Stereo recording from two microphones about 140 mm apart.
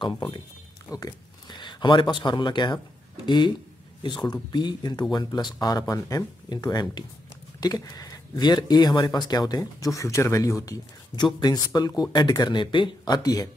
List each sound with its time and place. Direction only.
0.0 s speech: 35° left (ahead or behind)